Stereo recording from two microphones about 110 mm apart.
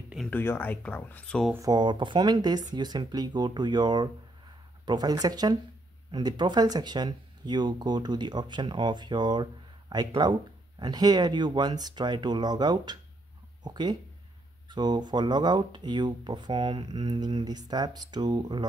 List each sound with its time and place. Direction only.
0.3 s speech: 15° left (ahead or behind)
1.6 s speech: 40° right (ahead or behind)